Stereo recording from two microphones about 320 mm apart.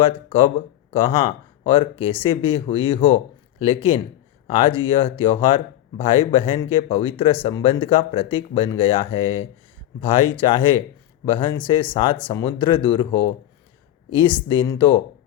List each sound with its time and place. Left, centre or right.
0.0 s speech: centre